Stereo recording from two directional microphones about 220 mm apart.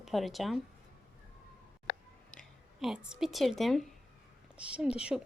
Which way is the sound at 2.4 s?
Centre (ahead or behind).